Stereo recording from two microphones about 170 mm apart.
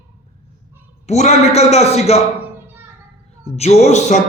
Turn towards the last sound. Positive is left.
turn(degrees=45)  # may be behind; listen again after turning